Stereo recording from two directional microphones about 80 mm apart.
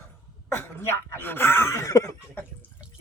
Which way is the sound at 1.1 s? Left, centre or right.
Left.